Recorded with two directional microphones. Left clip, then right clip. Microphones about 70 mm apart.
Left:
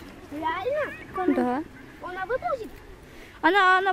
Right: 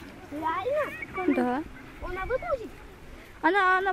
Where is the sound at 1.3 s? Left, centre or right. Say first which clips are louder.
Left 1 dB; centre.